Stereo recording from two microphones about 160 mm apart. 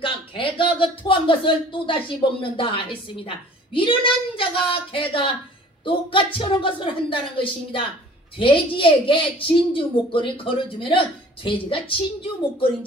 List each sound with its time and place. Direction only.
0.0 s speech: 30° left (ahead or behind)